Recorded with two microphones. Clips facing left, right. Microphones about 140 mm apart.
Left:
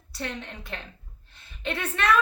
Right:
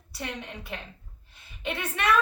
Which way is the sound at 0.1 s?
10° right (ahead or behind).